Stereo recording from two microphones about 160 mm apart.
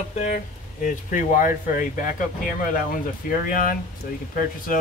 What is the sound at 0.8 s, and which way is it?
Speech, 55° left (ahead or behind).